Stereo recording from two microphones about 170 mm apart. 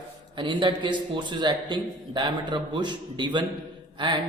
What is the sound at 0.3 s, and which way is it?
A man's voice, 30° right (ahead or behind).